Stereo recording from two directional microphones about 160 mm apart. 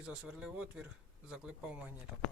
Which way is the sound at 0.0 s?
5° right (ahead or behind).